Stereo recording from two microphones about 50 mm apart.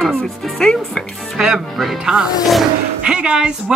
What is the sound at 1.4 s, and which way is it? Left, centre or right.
Speech, centre.